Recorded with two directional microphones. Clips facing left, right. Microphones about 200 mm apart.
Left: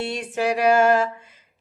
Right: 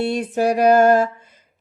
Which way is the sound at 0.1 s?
40° right (ahead or behind).